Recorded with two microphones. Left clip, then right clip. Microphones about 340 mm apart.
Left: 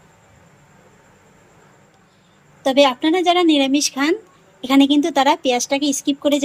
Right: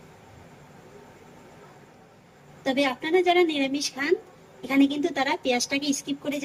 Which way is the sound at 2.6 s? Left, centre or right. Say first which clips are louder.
Left 11 dB; centre.